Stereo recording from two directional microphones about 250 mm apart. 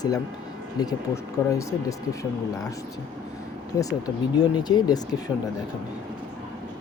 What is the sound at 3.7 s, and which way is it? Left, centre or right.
Speech, centre.